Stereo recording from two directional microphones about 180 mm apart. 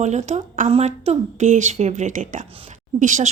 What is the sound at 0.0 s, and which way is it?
A woman's voice, 40° right (ahead or behind).